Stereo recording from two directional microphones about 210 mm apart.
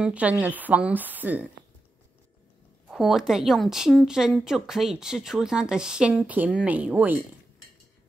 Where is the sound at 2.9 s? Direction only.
Centre (ahead or behind).